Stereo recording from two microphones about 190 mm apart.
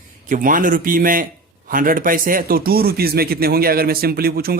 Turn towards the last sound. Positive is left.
turn(degrees=-55)  # may be behind; listen again after turning